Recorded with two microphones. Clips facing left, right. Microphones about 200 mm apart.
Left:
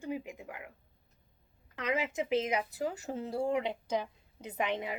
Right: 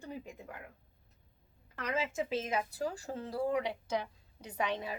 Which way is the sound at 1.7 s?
20° left (ahead or behind).